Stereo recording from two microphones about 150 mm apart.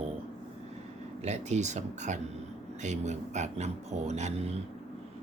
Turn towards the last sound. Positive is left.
turn(degrees=-50)  # may be behind; listen again after turning